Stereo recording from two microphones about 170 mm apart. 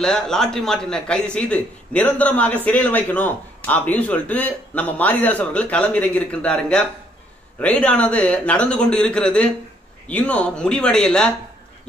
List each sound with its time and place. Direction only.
0.0 s a man's voice: 5° left (ahead or behind)